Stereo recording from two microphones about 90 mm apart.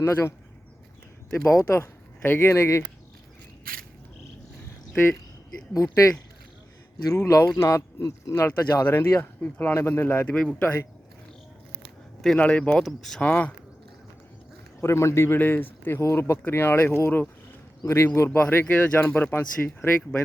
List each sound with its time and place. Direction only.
0.0 s speech: 30° left (ahead or behind)
1.6 s speech: 25° left (ahead or behind)
5.7 s speech: 35° left (ahead or behind)
7.1 s speech: 40° left (ahead or behind); by 10.3 s 20° left (ahead or behind)
10.3 s speech: 5° left (ahead or behind)
10.6 s speech: 25° left (ahead or behind)
12.4 s speech: 15° left (ahead or behind)
12.8 s speech: centre (ahead or behind)
13.2 s speech: 15° left (ahead or behind)
14.8 s speech: 30° left (ahead or behind)
18.3 s speech: 15° left (ahead or behind)